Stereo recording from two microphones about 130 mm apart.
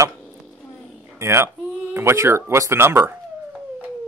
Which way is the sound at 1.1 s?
20° right (ahead or behind).